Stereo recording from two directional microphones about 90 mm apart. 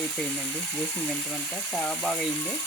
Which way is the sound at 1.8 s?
10° left (ahead or behind).